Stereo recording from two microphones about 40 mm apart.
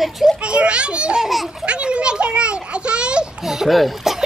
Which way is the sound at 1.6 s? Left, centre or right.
Right.